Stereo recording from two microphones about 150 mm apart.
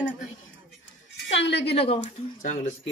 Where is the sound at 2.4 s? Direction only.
55° left (ahead or behind).